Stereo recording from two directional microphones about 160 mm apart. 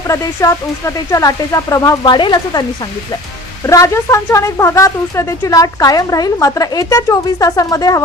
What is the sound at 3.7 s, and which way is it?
A woman's voice, 20° left (ahead or behind).